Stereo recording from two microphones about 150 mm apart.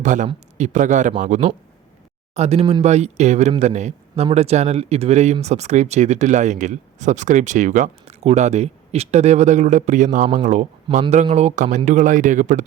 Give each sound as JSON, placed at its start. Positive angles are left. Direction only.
{"t": 0.0, "sound": "a man's voice", "side_deg": -55}